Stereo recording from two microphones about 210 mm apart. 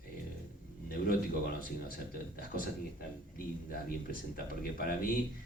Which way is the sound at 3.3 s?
45° left (ahead or behind).